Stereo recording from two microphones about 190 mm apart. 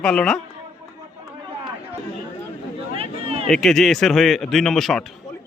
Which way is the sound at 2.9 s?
30° right (ahead or behind).